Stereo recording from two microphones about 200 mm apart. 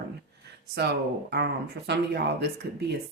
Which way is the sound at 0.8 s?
55° right (ahead or behind).